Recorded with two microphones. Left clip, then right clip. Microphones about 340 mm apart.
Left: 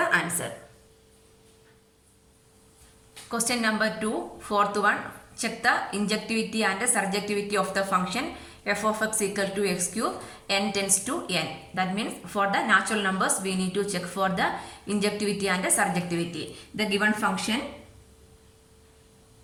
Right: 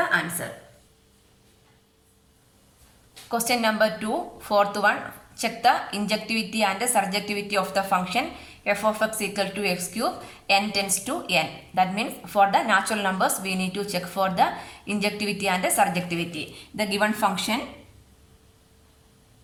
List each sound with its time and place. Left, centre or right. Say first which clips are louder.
3.2 s a woman's voice: right 4 dB; centre